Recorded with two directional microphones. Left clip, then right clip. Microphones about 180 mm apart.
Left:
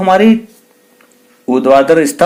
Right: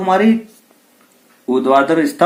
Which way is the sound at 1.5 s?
60° left (ahead or behind).